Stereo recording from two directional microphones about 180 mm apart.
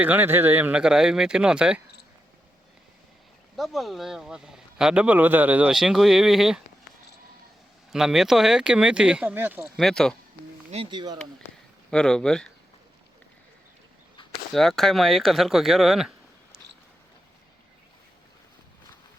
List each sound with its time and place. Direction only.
0.0 s speech: 10° right (ahead or behind)
3.6 s speech: centre (ahead or behind)
7.9 s speech: centre (ahead or behind)
10.7 s speech: 35° right (ahead or behind)
11.9 s speech: 5° left (ahead or behind)
14.5 s speech: centre (ahead or behind)